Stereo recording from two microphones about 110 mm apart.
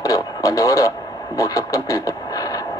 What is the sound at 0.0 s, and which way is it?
Speech, 30° left (ahead or behind).